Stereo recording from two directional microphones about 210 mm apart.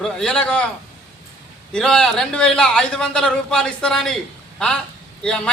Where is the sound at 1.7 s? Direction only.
5° left (ahead or behind).